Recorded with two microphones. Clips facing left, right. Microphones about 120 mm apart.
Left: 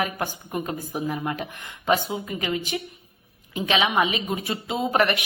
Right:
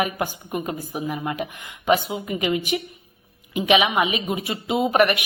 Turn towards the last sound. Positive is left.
turn(degrees=-15)  # may be behind; listen again after turning